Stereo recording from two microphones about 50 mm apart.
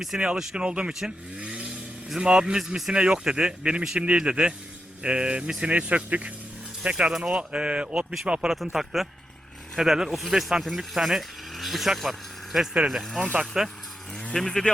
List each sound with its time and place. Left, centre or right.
0.1 s speech: centre
1.4 s vehicle: right
2.0 s speech: centre
2.9 s speech: centre
8.7 s speech: centre
13.1 s speech: right
13.4 s speech: centre
14.3 s speech: centre